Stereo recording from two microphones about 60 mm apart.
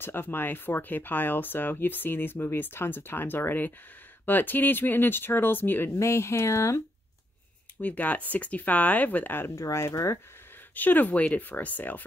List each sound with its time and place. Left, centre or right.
0.0 s speech: left
5.9 s speech: left
7.8 s speech: left
9.8 s speech: left
10.7 s speech: left